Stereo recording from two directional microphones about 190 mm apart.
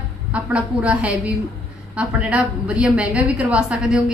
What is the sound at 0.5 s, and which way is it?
A woman's voice, 5° right (ahead or behind).